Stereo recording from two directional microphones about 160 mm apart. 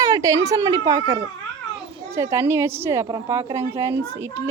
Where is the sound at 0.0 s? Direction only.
20° right (ahead or behind).